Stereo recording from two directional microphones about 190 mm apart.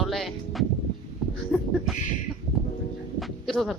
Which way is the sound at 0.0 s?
Centre (ahead or behind).